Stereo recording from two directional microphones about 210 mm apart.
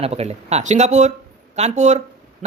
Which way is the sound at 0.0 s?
30° right (ahead or behind).